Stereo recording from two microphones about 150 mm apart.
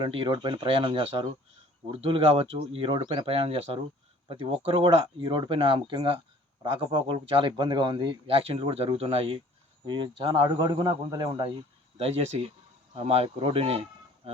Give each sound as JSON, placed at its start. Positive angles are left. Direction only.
{"t": 0.0, "sound": "a man's voice", "side_deg": -35}
{"t": 11.9, "sound": "a man's voice", "side_deg": -40}